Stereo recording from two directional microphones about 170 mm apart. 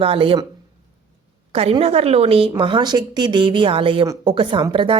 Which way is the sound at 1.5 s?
35° right (ahead or behind).